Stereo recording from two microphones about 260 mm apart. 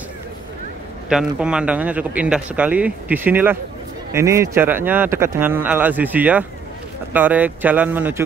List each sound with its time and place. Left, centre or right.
1.0 s a man's voice: centre